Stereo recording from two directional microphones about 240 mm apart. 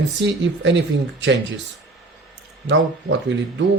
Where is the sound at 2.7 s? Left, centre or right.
Right.